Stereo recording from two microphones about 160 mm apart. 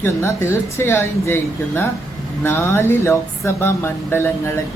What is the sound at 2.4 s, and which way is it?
Speech, 15° left (ahead or behind).